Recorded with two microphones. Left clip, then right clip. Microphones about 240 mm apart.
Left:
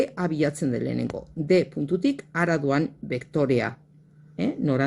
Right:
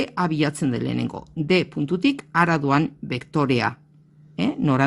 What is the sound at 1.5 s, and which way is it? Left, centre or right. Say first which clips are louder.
Speech: even; right.